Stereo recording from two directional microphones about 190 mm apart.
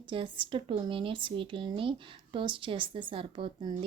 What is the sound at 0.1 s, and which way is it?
Speech, 25° right (ahead or behind).